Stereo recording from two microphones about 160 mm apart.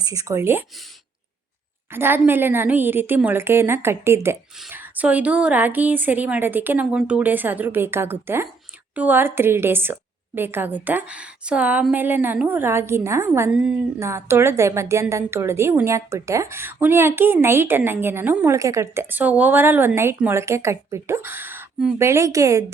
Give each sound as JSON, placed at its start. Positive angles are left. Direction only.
{"t": 0.0, "sound": "speech", "side_deg": -20}
{"t": 1.9, "sound": "a woman's voice", "side_deg": -15}